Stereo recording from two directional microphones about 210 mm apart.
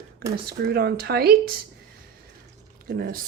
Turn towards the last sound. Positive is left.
turn(degrees=-45)  # may be behind; listen again after turning